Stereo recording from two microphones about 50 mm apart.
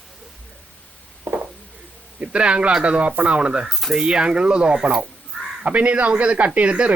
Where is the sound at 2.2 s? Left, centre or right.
Right.